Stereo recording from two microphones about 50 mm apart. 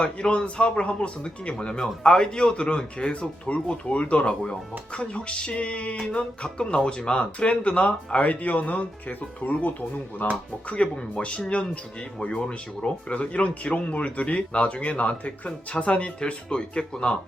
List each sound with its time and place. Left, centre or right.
0.0 s speech: left